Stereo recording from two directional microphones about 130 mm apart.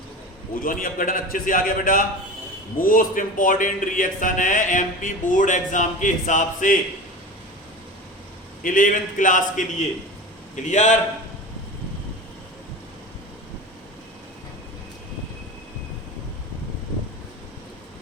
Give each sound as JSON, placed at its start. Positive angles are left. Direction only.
{"t": 0.6, "sound": "a man's voice", "side_deg": 90}
{"t": 8.6, "sound": "a man's voice", "side_deg": 90}
{"t": 10.5, "sound": "a man's voice", "side_deg": 65}